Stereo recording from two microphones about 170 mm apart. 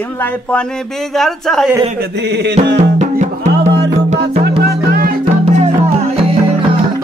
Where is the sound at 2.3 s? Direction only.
90° right.